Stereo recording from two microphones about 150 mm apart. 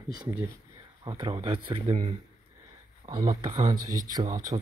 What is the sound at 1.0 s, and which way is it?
Speech, 30° right (ahead or behind).